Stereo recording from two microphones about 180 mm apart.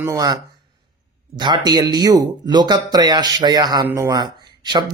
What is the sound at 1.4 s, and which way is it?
Speech, 25° right (ahead or behind).